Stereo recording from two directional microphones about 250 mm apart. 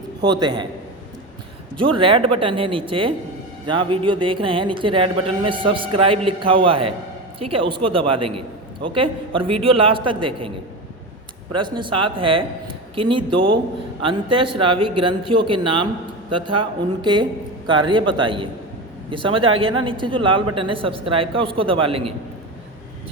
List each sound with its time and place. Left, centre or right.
0.2 s a man's voice: centre
1.8 s a man's voice: right
11.5 s a man's voice: centre